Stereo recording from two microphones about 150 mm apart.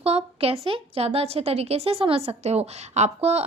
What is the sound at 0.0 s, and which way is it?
A woman's voice, 40° right (ahead or behind).